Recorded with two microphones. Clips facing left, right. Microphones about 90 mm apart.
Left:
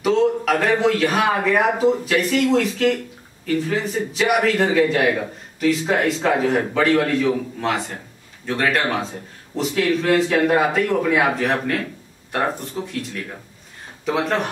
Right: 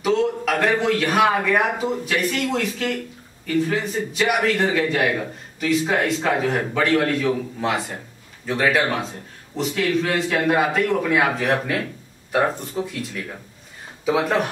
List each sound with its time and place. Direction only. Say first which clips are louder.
0.0 s a man's voice: left 2 dB; centre (ahead or behind)